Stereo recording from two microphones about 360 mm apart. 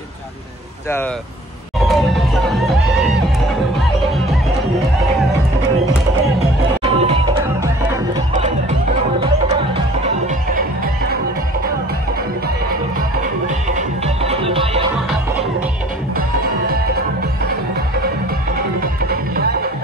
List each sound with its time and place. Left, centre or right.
1.8 s music: centre
6.8 s music: centre
13.7 s music: centre
18.8 s music: right